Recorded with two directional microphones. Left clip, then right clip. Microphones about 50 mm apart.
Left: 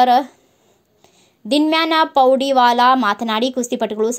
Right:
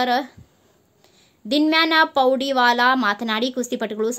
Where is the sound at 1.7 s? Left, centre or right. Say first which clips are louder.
Left 1 dB; left.